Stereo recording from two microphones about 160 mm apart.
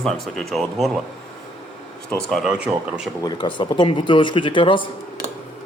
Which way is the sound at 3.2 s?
30° left (ahead or behind).